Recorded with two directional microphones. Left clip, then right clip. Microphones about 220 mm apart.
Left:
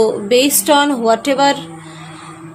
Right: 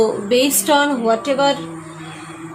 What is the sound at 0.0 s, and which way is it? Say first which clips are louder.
A woman's voice: left 3 dB; 30° left (ahead or behind).